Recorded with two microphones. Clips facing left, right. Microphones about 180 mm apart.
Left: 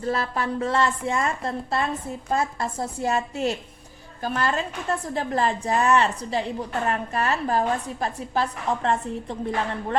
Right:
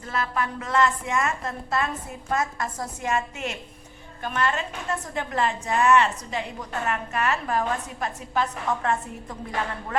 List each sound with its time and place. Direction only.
0.0 s a woman's voice: 35° left (ahead or behind)